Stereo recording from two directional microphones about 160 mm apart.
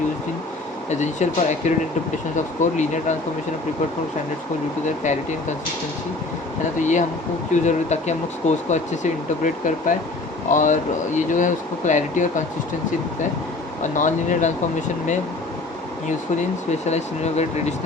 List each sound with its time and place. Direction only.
0.9 s speech: 45° left (ahead or behind)
6.7 s speech: 50° left (ahead or behind)
13.8 s speech: 50° left (ahead or behind)
16.8 s speech: 45° left (ahead or behind)